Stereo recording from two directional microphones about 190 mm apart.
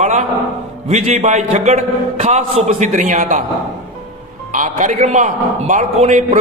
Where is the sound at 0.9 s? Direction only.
35° right (ahead or behind).